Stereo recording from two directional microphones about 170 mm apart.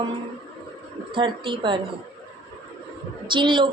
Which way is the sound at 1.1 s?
30° right (ahead or behind).